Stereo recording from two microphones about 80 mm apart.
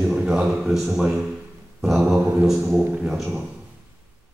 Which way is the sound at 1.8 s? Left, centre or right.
Centre.